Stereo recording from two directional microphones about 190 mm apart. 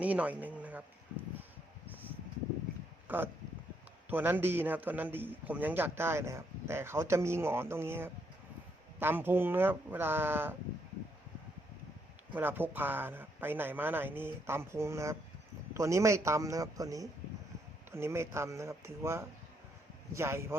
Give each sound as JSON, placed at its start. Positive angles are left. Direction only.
{"t": 0.0, "sound": "speech", "side_deg": -10}
{"t": 3.1, "sound": "a sound", "side_deg": -10}
{"t": 4.1, "sound": "a man's voice", "side_deg": -10}
{"t": 12.3, "sound": "a man's voice", "side_deg": -10}